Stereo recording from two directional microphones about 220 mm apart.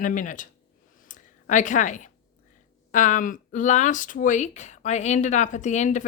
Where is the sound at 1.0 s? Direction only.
35° left (ahead or behind).